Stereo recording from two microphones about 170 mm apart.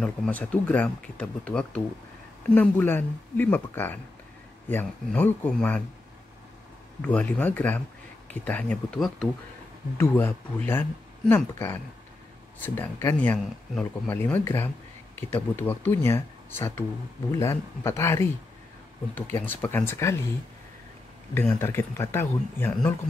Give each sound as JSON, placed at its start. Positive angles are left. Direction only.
{"t": 0.0, "sound": "speech", "side_deg": 10}
{"t": 7.0, "sound": "speech", "side_deg": 10}
{"t": 21.4, "sound": "speech", "side_deg": 15}